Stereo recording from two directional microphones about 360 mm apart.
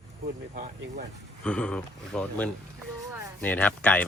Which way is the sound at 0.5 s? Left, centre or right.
Right.